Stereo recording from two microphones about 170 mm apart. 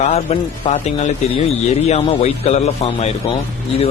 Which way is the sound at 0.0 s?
40° left (ahead or behind).